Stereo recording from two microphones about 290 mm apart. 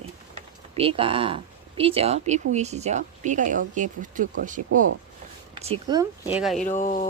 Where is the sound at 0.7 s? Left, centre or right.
Centre.